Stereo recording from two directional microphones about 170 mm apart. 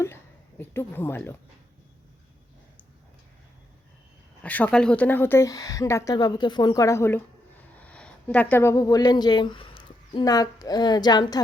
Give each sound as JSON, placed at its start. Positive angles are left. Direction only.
{"t": 0.6, "sound": "speech", "side_deg": 15}
{"t": 4.4, "sound": "a woman's voice", "side_deg": 10}